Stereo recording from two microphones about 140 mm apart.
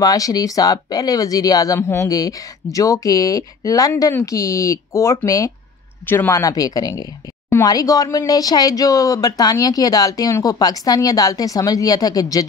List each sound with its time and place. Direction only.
0.0 s speech: 25° left (ahead or behind)